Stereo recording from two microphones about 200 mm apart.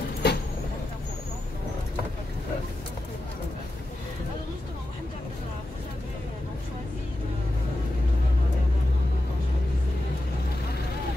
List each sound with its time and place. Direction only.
0.2 s vehicle: 55° left (ahead or behind)